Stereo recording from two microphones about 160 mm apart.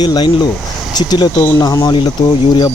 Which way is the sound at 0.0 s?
25° left (ahead or behind).